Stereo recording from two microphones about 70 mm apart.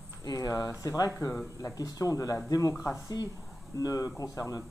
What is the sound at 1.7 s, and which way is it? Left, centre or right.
Speech, left.